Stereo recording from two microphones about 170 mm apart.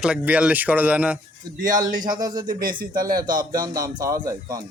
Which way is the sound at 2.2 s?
25° right (ahead or behind).